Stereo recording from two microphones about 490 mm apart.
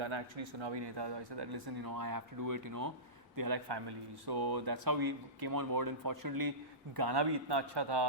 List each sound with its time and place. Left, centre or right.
0.0 s speech: right